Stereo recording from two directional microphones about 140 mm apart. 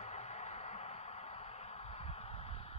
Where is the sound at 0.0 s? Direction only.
50° left (ahead or behind).